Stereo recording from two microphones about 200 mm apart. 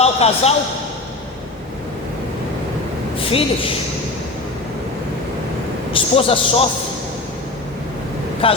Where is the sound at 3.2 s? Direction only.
30° left (ahead or behind).